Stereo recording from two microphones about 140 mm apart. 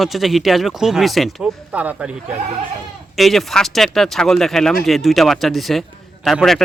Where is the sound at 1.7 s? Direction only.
10° right (ahead or behind).